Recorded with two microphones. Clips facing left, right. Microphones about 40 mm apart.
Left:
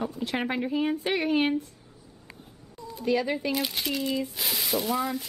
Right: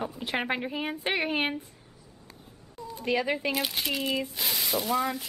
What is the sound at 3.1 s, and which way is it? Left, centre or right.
Speech, centre.